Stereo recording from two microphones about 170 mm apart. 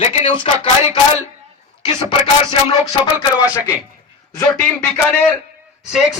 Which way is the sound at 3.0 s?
20° left (ahead or behind).